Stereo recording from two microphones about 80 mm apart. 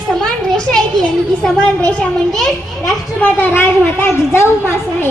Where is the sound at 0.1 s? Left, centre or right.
Centre.